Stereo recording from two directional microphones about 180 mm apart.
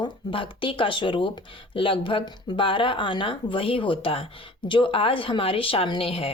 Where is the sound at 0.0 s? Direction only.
30° left (ahead or behind).